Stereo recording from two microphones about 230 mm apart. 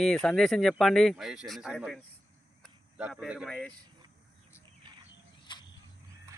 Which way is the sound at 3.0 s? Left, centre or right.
Centre.